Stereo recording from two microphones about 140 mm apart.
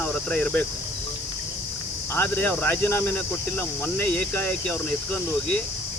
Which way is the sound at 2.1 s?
15° left (ahead or behind).